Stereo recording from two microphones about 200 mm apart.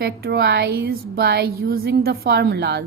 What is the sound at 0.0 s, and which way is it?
A woman's voice, 55° right (ahead or behind).